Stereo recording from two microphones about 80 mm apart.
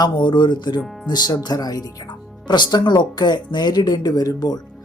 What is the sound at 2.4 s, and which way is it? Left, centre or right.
Speech, left.